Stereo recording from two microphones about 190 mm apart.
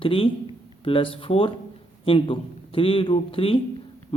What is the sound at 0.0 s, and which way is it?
Speech, 30° left (ahead or behind).